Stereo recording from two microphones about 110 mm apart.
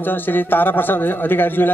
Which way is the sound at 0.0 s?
20° left (ahead or behind).